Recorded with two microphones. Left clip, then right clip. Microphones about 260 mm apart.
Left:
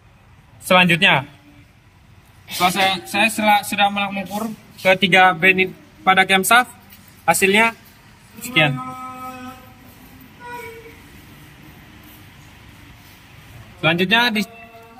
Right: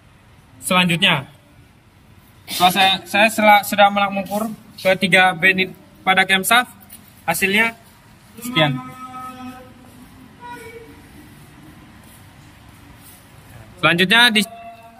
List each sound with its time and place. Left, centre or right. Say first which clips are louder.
0.7 s a man's voice: left 3 dB; centre
2.6 s speech: right 3 dB; centre
4.8 s a man's voice: left 1 dB; centre
13.7 s speech: right 3 dB; centre
14.1 s a man's voice: right 6 dB; centre